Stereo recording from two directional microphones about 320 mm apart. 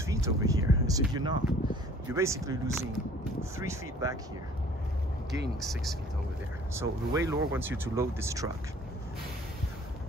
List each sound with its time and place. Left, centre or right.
0.0 s speech: centre
5.6 s speech: centre